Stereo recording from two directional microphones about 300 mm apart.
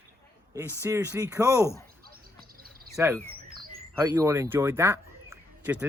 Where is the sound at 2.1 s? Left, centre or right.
Right.